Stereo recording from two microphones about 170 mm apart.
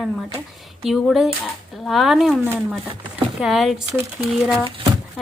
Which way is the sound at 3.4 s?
Centre (ahead or behind).